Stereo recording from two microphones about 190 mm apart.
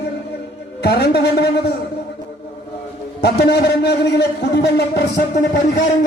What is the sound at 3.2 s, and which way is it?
A man's voice, 60° left (ahead or behind).